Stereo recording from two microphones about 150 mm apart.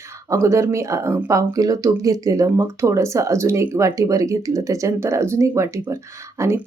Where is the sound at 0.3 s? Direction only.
20° right (ahead or behind).